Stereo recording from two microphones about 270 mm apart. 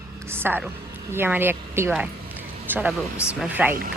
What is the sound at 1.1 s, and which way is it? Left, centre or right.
A woman's voice, centre.